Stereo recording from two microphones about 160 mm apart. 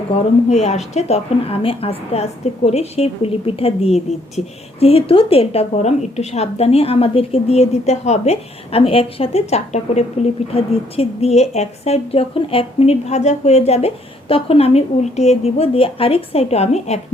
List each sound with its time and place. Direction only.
0.1 s a woman's voice: 45° left (ahead or behind)